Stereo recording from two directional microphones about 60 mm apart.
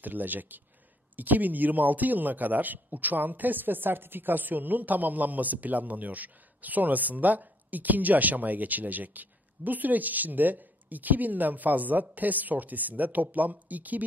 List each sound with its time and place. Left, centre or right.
0.0 s speech: right